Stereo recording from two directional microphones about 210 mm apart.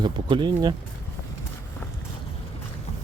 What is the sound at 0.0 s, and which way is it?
Speech, 20° right (ahead or behind).